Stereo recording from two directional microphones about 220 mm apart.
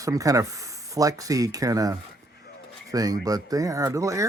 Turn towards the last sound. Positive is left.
turn(degrees=-15)  # may be behind; listen again after turning